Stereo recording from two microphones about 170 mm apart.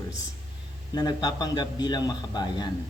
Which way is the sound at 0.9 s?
25° left (ahead or behind).